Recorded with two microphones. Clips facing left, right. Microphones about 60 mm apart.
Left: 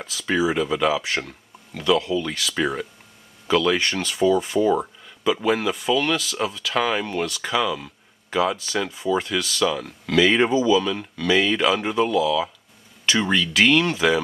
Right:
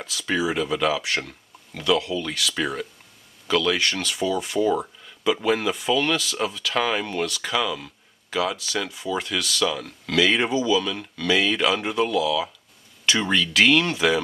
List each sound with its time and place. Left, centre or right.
0.0 s speech: centre
10.5 s speech: centre
10.8 s speech: centre